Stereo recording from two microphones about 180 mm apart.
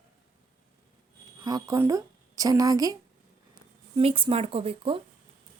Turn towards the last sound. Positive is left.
turn(degrees=-30)  # may be behind; listen again after turning